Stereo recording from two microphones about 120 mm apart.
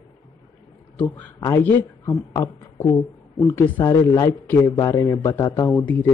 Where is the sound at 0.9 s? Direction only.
15° left (ahead or behind); by 5.7 s 30° left (ahead or behind).